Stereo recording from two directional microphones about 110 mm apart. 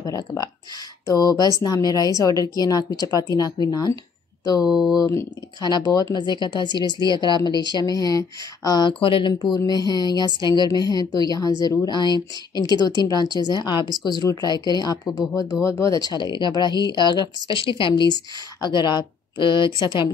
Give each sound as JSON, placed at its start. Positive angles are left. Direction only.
{"t": 0.0, "sound": "speech", "side_deg": 30}
{"t": 4.6, "sound": "speech", "side_deg": -5}
{"t": 4.9, "sound": "a woman's voice", "side_deg": 35}